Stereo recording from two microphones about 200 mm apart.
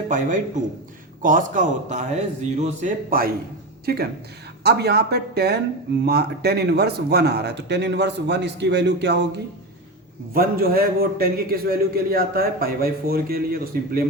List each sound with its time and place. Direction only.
0.1 s a man's voice: 40° right (ahead or behind)
4.6 s a man's voice: 55° right (ahead or behind)
10.3 s a man's voice: 50° right (ahead or behind)